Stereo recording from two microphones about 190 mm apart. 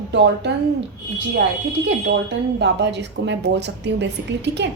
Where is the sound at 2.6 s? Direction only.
65° right (ahead or behind).